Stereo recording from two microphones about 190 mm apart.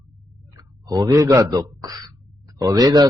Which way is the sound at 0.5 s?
15° right (ahead or behind).